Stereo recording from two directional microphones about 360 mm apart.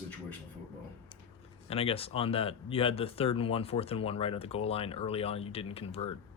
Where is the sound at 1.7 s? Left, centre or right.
Centre.